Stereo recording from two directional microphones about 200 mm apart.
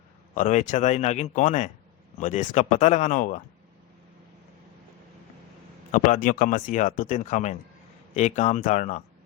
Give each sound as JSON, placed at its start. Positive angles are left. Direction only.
{"t": 0.3, "sound": "speech", "side_deg": 40}
{"t": 5.9, "sound": "speech", "side_deg": 45}